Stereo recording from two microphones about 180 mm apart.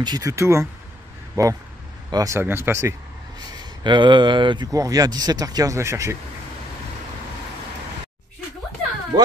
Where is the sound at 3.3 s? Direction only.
25° right (ahead or behind).